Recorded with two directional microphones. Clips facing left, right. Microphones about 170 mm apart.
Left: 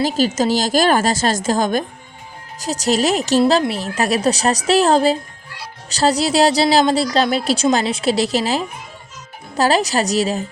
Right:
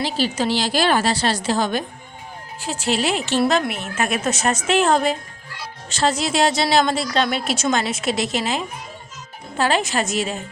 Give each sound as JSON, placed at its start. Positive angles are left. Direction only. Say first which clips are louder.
{"t": 0.0, "sound": "a woman's voice", "louder": "left 5 dB", "side_deg": 45}
{"t": 3.4, "sound": "a woman's voice", "louder": "left 4 dB", "side_deg": 25}